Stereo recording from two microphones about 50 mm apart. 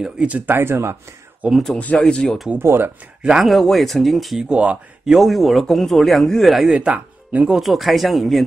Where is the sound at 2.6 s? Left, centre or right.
Right.